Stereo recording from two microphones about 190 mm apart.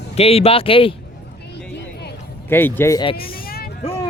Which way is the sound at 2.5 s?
10° left (ahead or behind).